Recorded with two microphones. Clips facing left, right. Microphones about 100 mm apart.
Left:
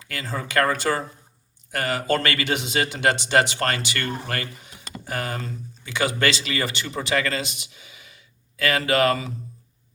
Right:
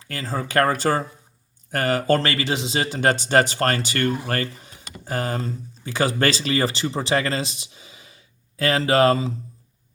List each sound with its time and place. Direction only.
0.0 s speech: 35° right (ahead or behind)